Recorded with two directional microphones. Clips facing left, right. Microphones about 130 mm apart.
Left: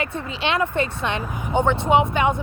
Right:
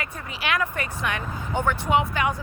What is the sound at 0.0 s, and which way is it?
A woman's voice, 25° left (ahead or behind).